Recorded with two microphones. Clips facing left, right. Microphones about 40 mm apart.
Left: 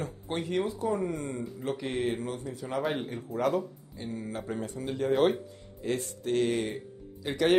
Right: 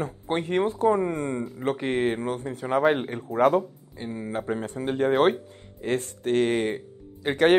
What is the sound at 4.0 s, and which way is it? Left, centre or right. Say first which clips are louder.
Speech: right 5 dB; right.